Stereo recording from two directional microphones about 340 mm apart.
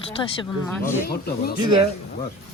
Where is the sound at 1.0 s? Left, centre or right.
Left.